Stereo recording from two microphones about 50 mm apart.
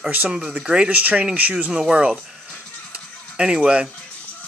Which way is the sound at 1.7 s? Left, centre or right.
Centre.